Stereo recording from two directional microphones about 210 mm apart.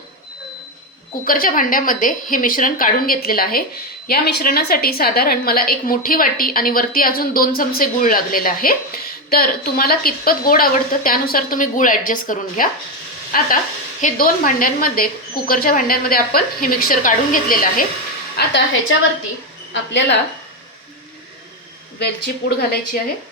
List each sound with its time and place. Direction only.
1.2 s a woman's voice: 40° left (ahead or behind)
18.3 s a woman's voice: 60° left (ahead or behind)
22.4 s a woman's voice: 50° left (ahead or behind)